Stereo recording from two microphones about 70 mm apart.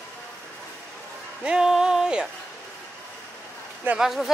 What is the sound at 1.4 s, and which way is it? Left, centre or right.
Speech, centre.